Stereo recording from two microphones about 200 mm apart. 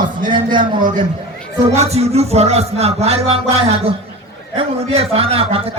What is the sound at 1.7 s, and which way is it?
Music, 30° right (ahead or behind).